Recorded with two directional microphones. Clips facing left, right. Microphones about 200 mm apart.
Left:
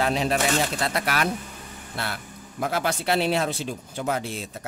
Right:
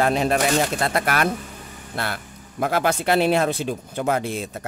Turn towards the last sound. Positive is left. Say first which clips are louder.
# right 5 dB
turn(degrees=-55)  # may be behind; listen again after turning